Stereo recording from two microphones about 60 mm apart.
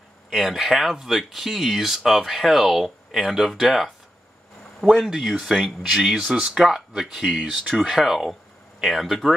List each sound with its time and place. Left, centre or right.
0.3 s speech: centre